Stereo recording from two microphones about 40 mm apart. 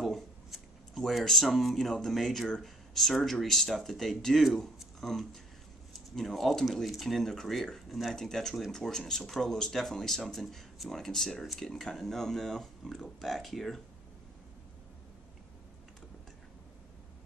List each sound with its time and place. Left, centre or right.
0.0 s speech: centre
8.2 s speech: centre